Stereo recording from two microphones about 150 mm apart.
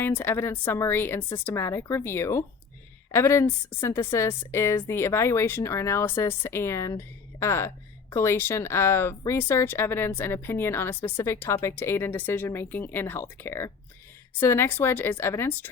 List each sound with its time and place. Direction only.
0.0 s speech: 15° left (ahead or behind)